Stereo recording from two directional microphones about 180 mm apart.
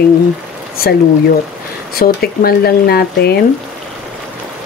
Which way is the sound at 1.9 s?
55° left (ahead or behind).